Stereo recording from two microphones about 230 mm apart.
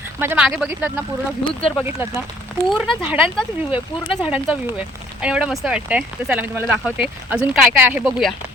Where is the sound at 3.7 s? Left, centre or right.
Left.